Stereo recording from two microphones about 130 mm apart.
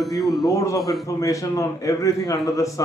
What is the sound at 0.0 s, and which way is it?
Speech, centre (ahead or behind).